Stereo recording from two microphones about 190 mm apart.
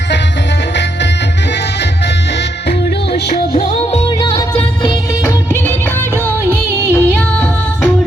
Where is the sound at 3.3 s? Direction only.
35° left (ahead or behind).